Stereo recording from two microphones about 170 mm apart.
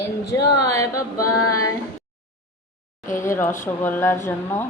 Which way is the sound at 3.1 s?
15° left (ahead or behind).